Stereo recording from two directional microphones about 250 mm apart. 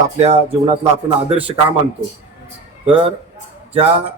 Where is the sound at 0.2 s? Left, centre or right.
Right.